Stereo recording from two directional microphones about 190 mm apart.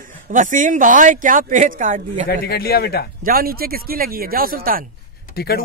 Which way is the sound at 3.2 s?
50° right (ahead or behind).